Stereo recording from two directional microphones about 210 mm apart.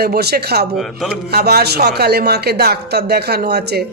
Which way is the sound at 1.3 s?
50° right (ahead or behind).